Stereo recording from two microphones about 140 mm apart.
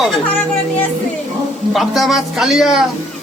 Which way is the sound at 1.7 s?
Centre (ahead or behind).